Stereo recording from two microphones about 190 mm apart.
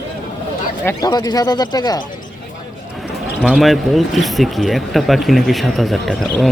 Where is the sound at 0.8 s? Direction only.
15° left (ahead or behind).